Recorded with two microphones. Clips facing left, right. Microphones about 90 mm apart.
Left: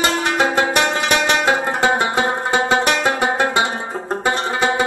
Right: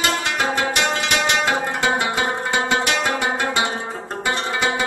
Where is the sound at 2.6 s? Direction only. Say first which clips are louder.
Left 4 dB; 30° left (ahead or behind).